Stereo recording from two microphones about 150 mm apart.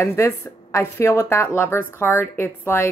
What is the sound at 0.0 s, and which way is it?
Speech, 20° left (ahead or behind).